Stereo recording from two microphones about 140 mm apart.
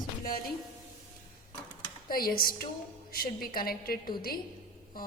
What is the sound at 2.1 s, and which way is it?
A woman's voice, 90° left.